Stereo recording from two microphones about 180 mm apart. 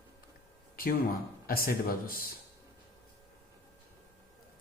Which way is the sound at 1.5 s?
55° left (ahead or behind).